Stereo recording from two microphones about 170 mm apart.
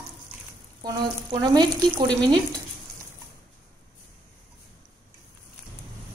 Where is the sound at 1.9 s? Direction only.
5° left (ahead or behind).